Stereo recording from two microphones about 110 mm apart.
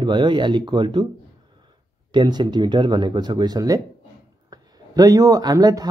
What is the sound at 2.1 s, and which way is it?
Speech, 40° right (ahead or behind).